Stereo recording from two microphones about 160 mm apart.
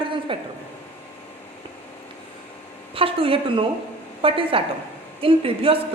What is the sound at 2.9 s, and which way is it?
A woman's voice, 35° right (ahead or behind).